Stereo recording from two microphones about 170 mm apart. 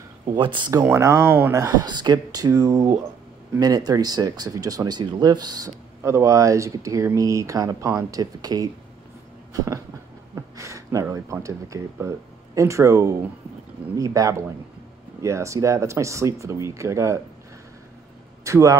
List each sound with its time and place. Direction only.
0.4 s speech: 30° right (ahead or behind)
9.5 s a sound: 20° right (ahead or behind)
10.3 s speech: 20° right (ahead or behind)
18.4 s a man's voice: 15° right (ahead or behind)